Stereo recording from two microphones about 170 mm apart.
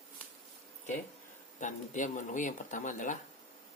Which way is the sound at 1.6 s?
45° left (ahead or behind).